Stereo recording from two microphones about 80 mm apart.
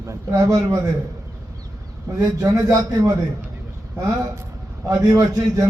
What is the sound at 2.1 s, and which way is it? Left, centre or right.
A man's voice, right.